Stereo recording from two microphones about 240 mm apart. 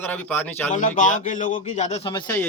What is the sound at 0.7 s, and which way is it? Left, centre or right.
Speech, left.